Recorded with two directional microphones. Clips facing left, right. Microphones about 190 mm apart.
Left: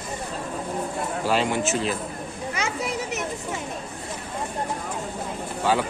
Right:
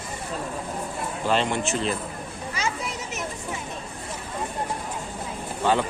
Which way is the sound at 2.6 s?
60° left (ahead or behind).